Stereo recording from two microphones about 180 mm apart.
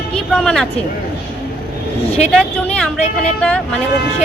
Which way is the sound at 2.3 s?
5° left (ahead or behind).